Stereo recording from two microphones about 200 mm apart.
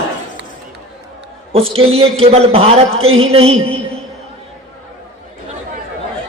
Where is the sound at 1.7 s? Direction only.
30° right (ahead or behind).